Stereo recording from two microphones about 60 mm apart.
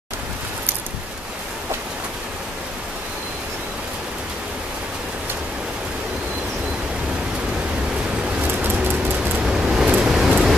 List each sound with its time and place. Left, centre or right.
8.4 s vehicle: right
9.4 s vehicle: centre
9.9 s a sound: centre